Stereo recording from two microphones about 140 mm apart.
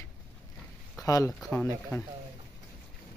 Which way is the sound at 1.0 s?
25° left (ahead or behind).